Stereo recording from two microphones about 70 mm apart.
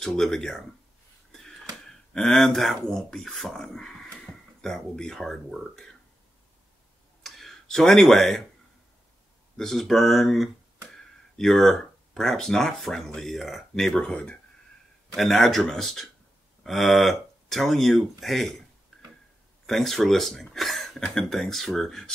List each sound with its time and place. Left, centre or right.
0.0 s speech: centre
2.1 s speech: centre
7.2 s speech: centre
9.6 s speech: centre
15.1 s speech: centre
19.6 s speech: centre